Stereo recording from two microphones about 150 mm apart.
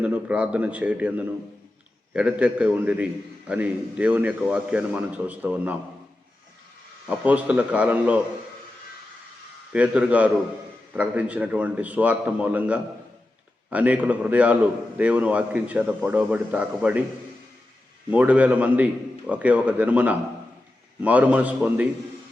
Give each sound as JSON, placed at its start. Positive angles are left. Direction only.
{"t": 0.0, "sound": "a man's voice", "side_deg": -10}
{"t": 7.1, "sound": "a man's voice", "side_deg": -10}
{"t": 9.7, "sound": "a man's voice", "side_deg": -10}
{"t": 18.1, "sound": "a man's voice", "side_deg": -10}